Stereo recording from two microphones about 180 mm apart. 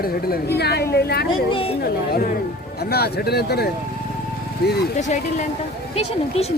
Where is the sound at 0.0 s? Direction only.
60° left (ahead or behind).